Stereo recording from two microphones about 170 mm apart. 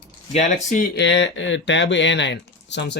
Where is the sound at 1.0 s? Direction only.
90° left.